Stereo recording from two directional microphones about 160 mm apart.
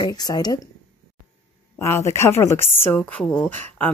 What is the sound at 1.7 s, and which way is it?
Speech, 15° left (ahead or behind).